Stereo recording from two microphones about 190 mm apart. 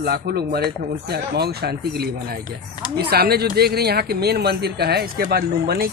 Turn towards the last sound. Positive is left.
turn(degrees=-55)  # may be behind; listen again after turning